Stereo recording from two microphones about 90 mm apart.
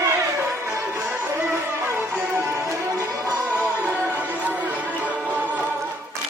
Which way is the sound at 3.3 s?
15° right (ahead or behind).